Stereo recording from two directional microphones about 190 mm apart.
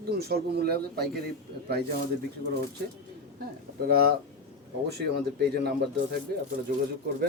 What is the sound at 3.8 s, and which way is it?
Speech, 55° right (ahead or behind).